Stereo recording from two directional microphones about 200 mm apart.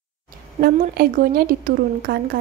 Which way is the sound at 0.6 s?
50° right (ahead or behind).